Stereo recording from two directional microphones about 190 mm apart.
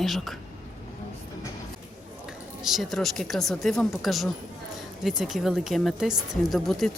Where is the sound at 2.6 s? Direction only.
Centre (ahead or behind).